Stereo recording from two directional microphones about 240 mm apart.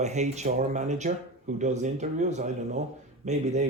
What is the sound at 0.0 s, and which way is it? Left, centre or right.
Speech, right.